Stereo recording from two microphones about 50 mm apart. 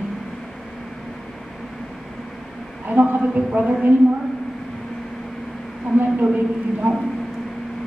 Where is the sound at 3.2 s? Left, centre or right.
Right.